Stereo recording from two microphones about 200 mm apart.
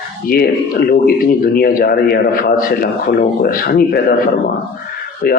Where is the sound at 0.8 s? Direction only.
50° left (ahead or behind).